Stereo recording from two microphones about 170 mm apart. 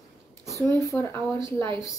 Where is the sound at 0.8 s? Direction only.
15° left (ahead or behind).